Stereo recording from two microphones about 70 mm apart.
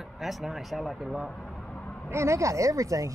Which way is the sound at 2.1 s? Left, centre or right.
Right.